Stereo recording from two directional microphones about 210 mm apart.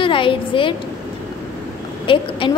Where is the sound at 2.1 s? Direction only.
25° left (ahead or behind).